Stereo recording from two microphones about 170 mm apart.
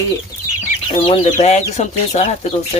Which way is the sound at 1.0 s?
35° left (ahead or behind).